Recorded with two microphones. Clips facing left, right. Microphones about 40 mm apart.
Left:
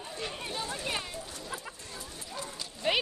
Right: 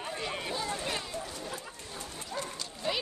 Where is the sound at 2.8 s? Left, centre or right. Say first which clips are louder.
Left 4 dB; left.